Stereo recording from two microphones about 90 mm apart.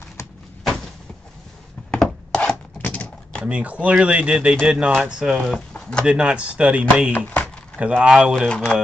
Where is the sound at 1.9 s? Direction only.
5° left (ahead or behind).